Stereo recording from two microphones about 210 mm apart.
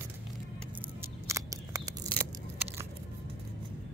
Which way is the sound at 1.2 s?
15° right (ahead or behind).